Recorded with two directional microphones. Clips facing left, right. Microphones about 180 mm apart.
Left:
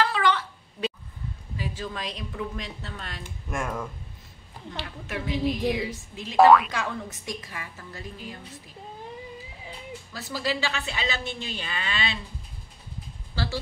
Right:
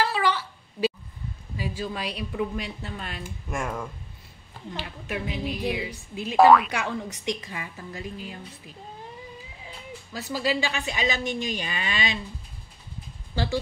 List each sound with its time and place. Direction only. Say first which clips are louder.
0.0 s a sound: left 1 dB; 10° right (ahead or behind)
1.6 s a woman's voice: right 3 dB; 10° right (ahead or behind)
3.4 s a woman's voice: even; centre (ahead or behind)
6.3 s speech: even; centre (ahead or behind)
6.7 s a woman's voice: right 2 dB; 15° right (ahead or behind)
10.1 s a woman's voice: right 3 dB; 15° right (ahead or behind)
13.3 s speech: right 4 dB; 15° right (ahead or behind)